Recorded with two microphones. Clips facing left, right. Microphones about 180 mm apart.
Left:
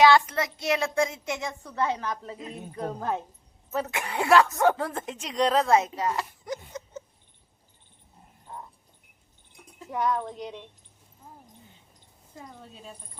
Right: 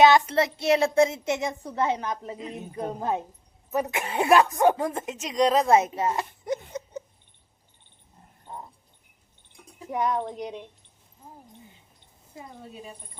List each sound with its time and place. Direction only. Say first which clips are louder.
0.0 s a child's voice: right 2 dB; 25° right (ahead or behind)
5.7 s a sound: right 2 dB; 25° right (ahead or behind)
9.7 s a child's voice: right 1 dB; 20° right (ahead or behind)
12.3 s speech: right 3 dB; 10° right (ahead or behind)